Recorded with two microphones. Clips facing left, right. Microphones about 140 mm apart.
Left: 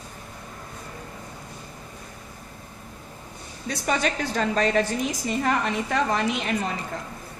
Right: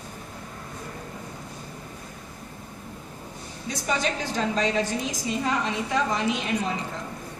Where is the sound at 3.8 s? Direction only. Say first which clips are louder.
Left 2 dB; 55° left (ahead or behind).